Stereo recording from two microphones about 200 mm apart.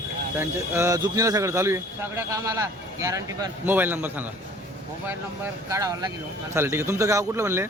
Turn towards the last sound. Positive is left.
turn(degrees=-15)  # may be behind; listen again after turning